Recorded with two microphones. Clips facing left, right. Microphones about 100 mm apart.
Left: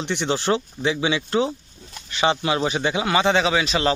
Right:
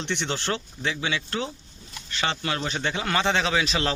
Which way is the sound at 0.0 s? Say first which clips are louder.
Left 5 dB; 10° left (ahead or behind).